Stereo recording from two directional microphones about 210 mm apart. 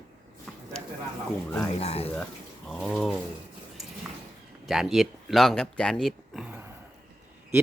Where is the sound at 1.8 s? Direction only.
30° left (ahead or behind).